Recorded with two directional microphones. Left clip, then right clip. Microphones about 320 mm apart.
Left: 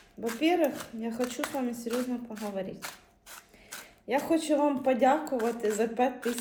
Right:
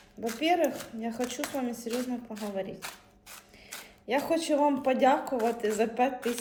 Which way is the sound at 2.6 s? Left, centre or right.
Centre.